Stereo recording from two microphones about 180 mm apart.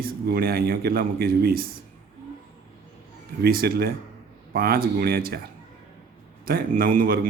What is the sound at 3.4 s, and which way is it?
Speech, 60° right (ahead or behind).